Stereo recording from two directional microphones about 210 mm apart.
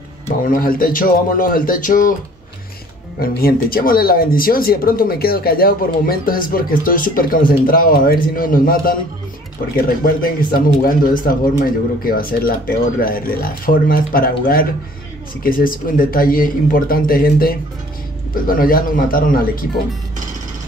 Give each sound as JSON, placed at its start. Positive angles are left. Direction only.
{"t": 0.4, "sound": "speech", "side_deg": 40}
{"t": 3.2, "sound": "speech", "side_deg": 45}